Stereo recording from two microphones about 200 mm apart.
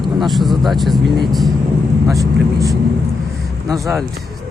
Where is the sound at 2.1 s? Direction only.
15° right (ahead or behind).